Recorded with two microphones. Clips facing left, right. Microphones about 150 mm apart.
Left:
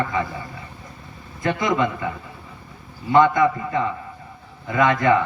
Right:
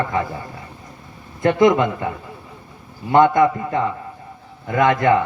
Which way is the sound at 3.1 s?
50° right (ahead or behind).